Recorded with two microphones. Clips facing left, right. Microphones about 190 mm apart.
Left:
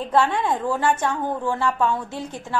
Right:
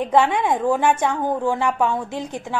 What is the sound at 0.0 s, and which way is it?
A woman's voice, 15° right (ahead or behind).